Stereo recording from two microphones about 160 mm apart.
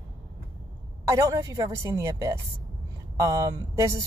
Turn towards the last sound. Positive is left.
turn(degrees=-20)  # may be behind; listen again after turning